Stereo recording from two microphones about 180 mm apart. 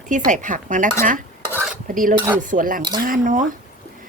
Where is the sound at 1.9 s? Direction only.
50° right (ahead or behind).